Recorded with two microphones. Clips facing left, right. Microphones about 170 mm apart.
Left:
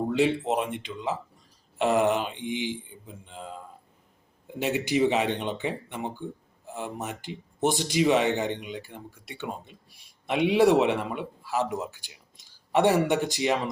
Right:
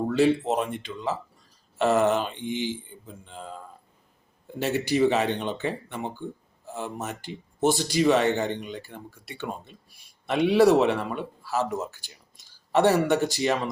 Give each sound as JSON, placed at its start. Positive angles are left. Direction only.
{"t": 0.1, "sound": "speech", "side_deg": 15}